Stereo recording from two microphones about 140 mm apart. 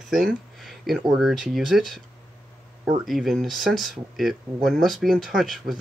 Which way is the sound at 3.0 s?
Centre (ahead or behind).